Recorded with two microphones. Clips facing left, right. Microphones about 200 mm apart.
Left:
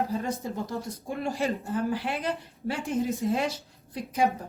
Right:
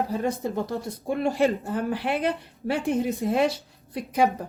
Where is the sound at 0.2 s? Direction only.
65° right (ahead or behind).